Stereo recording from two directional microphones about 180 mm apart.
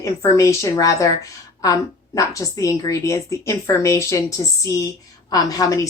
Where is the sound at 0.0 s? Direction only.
15° left (ahead or behind).